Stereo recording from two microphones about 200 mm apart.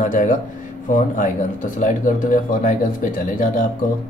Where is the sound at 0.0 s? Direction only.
40° left (ahead or behind).